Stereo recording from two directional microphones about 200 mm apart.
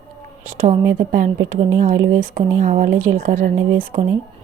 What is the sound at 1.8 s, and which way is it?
Speech, 45° right (ahead or behind).